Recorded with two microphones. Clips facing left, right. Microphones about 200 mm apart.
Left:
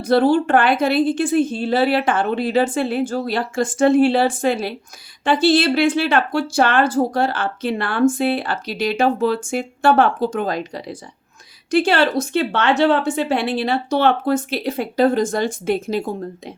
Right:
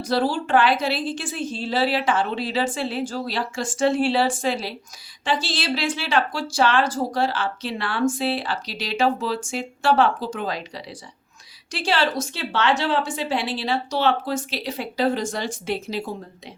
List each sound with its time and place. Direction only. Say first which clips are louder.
0.0 s speech: left 8 dB; 60° left (ahead or behind)